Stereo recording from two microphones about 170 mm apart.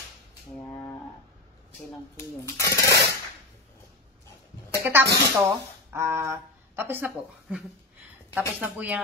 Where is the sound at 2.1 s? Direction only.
20° left (ahead or behind).